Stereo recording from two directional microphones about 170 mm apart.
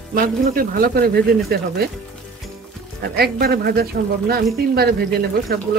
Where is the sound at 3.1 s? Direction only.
65° right (ahead or behind).